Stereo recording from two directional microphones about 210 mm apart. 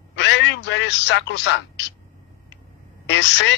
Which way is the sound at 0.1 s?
55° left (ahead or behind).